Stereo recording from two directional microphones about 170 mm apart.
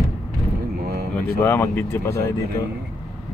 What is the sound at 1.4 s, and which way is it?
Speech, 10° left (ahead or behind).